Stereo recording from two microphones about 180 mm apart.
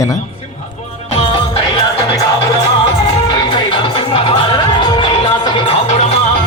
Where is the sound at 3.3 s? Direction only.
25° left (ahead or behind).